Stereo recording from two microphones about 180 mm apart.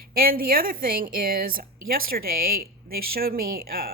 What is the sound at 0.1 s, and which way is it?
A woman's voice, 55° right (ahead or behind).